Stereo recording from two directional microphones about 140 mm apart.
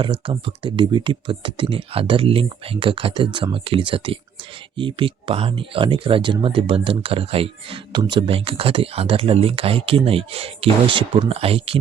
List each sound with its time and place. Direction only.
0.0 s speech: 40° right (ahead or behind)